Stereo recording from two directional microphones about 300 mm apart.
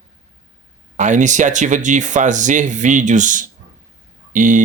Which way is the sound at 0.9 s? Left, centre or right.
Right.